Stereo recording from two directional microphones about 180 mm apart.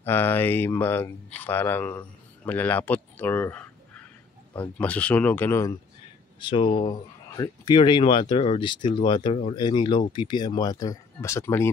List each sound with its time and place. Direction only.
0.0 s speech: 10° left (ahead or behind)
6.4 s speech: 30° left (ahead or behind)